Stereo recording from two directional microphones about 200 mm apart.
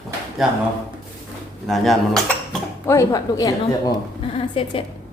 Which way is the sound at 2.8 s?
15° left (ahead or behind).